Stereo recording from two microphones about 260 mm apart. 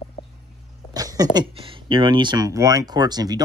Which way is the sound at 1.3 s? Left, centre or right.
Right.